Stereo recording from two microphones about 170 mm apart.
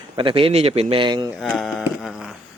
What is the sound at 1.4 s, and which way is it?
Speech, centre (ahead or behind).